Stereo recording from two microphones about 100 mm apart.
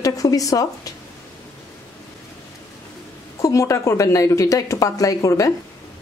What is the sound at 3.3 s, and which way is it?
A woman's voice, 30° left (ahead or behind).